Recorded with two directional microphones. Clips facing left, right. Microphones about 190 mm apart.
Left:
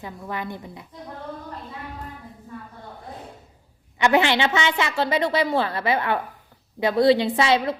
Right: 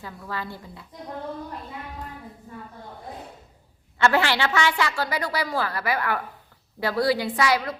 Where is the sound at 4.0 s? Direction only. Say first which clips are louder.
Left 2 dB; 20° left (ahead or behind).